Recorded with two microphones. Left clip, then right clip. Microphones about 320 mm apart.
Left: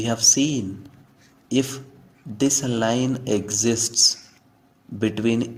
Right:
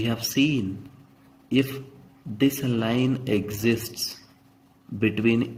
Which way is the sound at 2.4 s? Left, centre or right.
Left.